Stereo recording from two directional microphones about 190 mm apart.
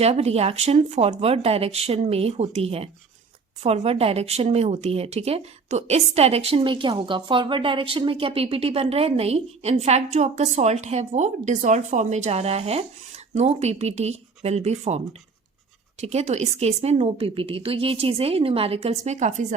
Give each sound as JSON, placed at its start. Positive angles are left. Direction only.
{"t": 0.0, "sound": "speech", "side_deg": -35}